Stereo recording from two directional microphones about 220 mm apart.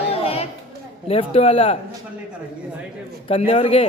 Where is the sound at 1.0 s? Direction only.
25° left (ahead or behind).